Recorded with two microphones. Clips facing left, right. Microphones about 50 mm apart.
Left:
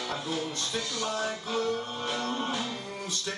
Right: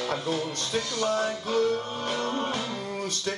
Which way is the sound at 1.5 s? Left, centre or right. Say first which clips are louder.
Right 6 dB; right.